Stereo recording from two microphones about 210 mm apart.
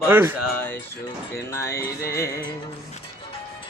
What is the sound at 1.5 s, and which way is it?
Speech, 15° left (ahead or behind).